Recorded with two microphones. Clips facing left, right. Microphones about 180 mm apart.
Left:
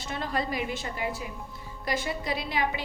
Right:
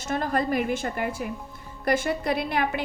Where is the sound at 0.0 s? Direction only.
50° right (ahead or behind).